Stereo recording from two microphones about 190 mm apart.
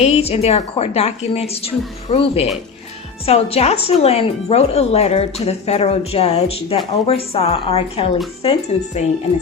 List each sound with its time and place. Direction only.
0.0 s speech: 35° left (ahead or behind)